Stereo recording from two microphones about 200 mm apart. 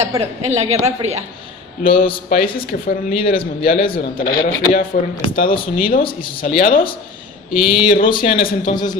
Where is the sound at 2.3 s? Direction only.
45° left (ahead or behind).